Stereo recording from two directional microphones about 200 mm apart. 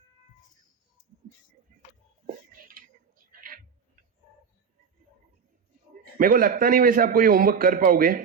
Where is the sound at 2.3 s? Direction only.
45° right (ahead or behind).